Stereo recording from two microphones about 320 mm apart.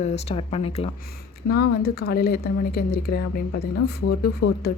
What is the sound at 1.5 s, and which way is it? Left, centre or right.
Speech, left.